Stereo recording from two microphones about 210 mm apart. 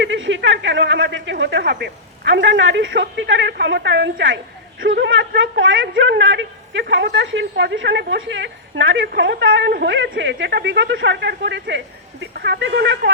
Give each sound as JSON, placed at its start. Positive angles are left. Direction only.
{"t": 0.0, "sound": "a man's voice", "side_deg": -60}